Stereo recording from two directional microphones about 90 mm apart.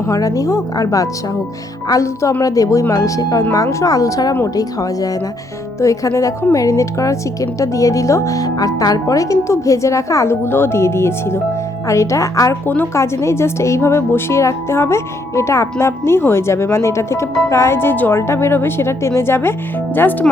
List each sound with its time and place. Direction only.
0.1 s speech: 40° left (ahead or behind)
12.6 s speech: 20° left (ahead or behind)